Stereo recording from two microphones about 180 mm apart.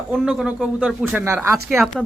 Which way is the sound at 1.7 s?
Centre (ahead or behind).